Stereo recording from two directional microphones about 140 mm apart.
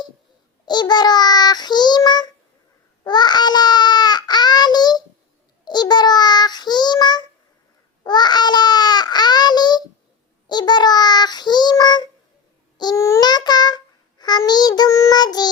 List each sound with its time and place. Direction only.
0.6 s child singing: 30° left (ahead or behind)
3.0 s baby cry: 30° left (ahead or behind)
5.6 s child singing: 30° left (ahead or behind)
8.0 s babbling: 30° left (ahead or behind)
10.4 s child singing: 30° left (ahead or behind)